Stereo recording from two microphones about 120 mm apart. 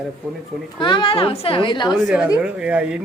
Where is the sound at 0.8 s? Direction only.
40° left (ahead or behind).